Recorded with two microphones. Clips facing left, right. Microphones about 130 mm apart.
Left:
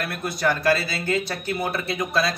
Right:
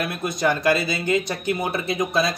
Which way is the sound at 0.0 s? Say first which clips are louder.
Right 2 dB; 20° right (ahead or behind).